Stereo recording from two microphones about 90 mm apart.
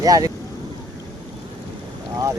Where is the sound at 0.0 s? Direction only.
45° right (ahead or behind).